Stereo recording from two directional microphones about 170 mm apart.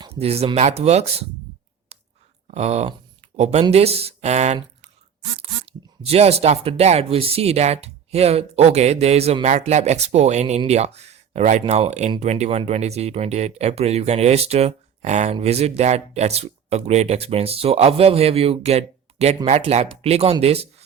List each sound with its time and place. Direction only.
0.0 s speech: 35° right (ahead or behind)
1.9 s clicking: 40° right (ahead or behind)
2.5 s speech: 40° right (ahead or behind)